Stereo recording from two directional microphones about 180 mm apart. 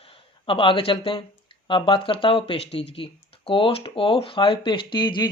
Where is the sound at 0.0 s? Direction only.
30° left (ahead or behind).